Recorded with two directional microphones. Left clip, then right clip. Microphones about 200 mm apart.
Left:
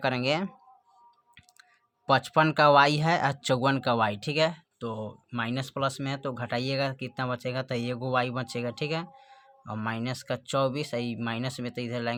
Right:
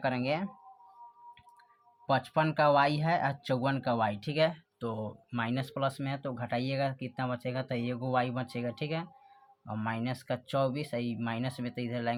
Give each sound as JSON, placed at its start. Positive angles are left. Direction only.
{"t": 0.0, "sound": "speech", "side_deg": 35}
{"t": 2.0, "sound": "speech", "side_deg": 35}
{"t": 4.8, "sound": "speech", "side_deg": 10}